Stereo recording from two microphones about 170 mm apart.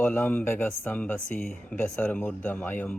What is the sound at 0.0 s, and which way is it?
Speech, 10° left (ahead or behind).